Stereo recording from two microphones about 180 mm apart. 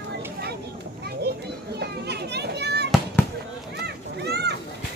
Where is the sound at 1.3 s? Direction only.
65° right (ahead or behind).